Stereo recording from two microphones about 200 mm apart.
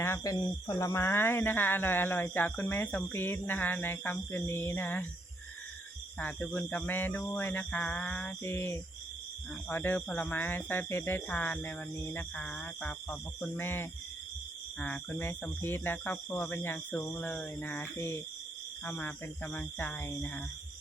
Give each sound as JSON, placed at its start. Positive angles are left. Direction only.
{"t": 0.0, "sound": "speech", "side_deg": 15}
{"t": 6.1, "sound": "speech", "side_deg": 5}